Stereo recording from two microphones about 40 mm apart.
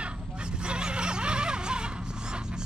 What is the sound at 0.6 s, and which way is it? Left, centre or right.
Neigh, right.